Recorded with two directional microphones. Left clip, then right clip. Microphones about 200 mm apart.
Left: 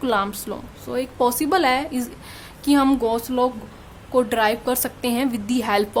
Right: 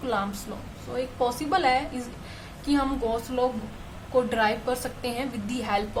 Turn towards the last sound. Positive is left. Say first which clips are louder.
# left 7 dB
turn(degrees=50)  # may be behind; listen again after turning